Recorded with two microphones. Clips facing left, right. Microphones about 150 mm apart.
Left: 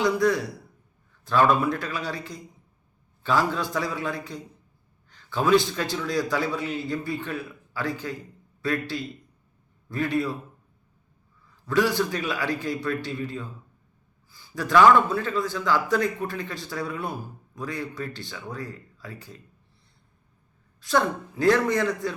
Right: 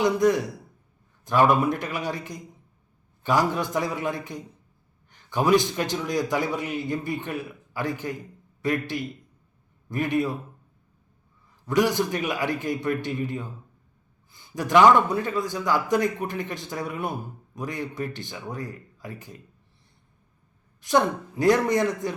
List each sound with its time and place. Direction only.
0.0 s a man's voice: 20° right (ahead or behind)
11.6 s a man's voice: 15° right (ahead or behind)
20.8 s a man's voice: 20° right (ahead or behind)